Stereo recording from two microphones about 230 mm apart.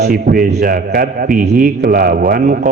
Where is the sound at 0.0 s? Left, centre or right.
Right.